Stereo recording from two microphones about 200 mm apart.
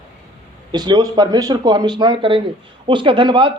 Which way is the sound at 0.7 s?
20° right (ahead or behind).